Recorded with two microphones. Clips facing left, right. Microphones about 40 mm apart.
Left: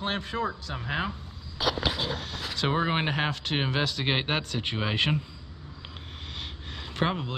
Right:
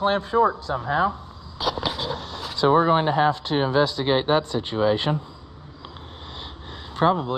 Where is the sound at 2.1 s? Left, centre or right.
Left.